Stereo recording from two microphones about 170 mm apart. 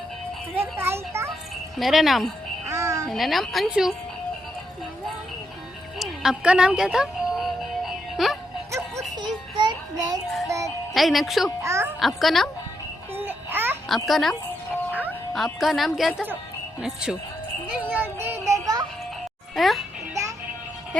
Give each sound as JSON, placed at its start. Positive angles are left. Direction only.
{"t": 0.5, "sound": "a child's voice", "side_deg": -15}
{"t": 1.8, "sound": "a woman's voice", "side_deg": 0}
{"t": 2.6, "sound": "music", "side_deg": -15}
{"t": 3.1, "sound": "a woman's voice", "side_deg": 0}
{"t": 6.0, "sound": "music", "side_deg": -5}
{"t": 9.2, "sound": "child singing", "side_deg": -25}
{"t": 10.9, "sound": "a woman's voice", "side_deg": 0}
{"t": 11.6, "sound": "speech", "side_deg": -15}
{"t": 11.9, "sound": "a woman's voice", "side_deg": 0}
{"t": 13.1, "sound": "music", "side_deg": -10}
{"t": 13.8, "sound": "a woman's voice", "side_deg": 0}
{"t": 15.4, "sound": "a woman's voice", "side_deg": 0}
{"t": 17.7, "sound": "music", "side_deg": -10}
{"t": 19.5, "sound": "a woman's voice", "side_deg": 0}